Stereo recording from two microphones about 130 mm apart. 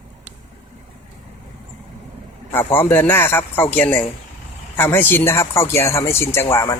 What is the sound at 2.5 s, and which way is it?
A man's voice, 15° left (ahead or behind).